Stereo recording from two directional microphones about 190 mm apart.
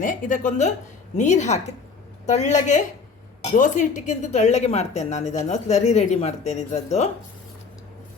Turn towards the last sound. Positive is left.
turn(degrees=35)  # may be behind; listen again after turning